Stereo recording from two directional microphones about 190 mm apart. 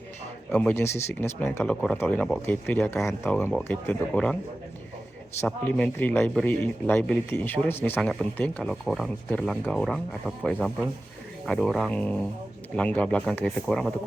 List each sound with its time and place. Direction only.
0.5 s speech: 5° left (ahead or behind)
3.0 s speech: centre (ahead or behind)
5.5 s speech: 5° left (ahead or behind)